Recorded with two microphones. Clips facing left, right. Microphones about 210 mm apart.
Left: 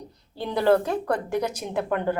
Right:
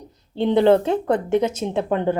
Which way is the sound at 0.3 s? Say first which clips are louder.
Right 6 dB; 25° right (ahead or behind).